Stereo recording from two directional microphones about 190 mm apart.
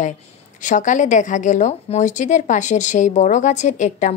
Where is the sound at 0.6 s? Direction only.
40° left (ahead or behind).